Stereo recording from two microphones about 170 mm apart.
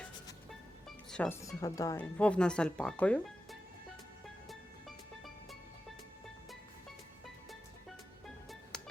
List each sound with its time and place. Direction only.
0.9 s music: 5° left (ahead or behind)
1.4 s speech: 20° left (ahead or behind)
2.0 s speech: 5° left (ahead or behind)
4.4 s music: centre (ahead or behind)
8.7 s music: 5° left (ahead or behind)